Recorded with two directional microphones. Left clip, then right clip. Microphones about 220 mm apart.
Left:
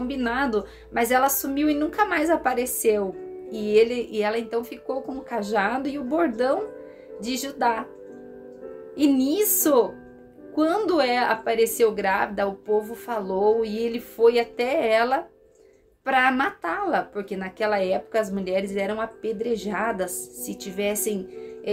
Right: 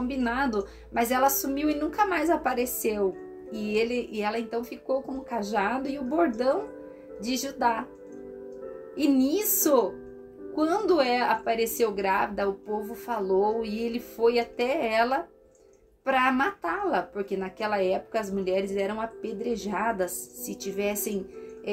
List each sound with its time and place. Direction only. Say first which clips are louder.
0.1 s speech: left 4 dB; 20° left (ahead or behind)
8.9 s speech: left 3 dB; 25° left (ahead or behind)